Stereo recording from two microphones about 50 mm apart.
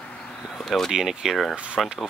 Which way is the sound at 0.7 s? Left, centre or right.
Centre.